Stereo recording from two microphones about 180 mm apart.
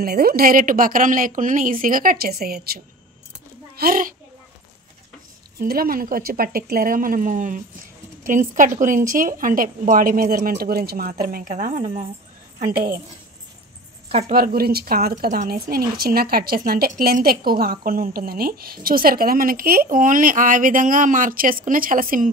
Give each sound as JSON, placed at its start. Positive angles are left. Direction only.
{"t": 0.0, "sound": "a woman's voice", "side_deg": -55}
{"t": 5.6, "sound": "a woman's voice", "side_deg": -55}
{"t": 14.3, "sound": "a woman's voice", "side_deg": -55}
{"t": 15.4, "sound": "a woman's voice", "side_deg": -55}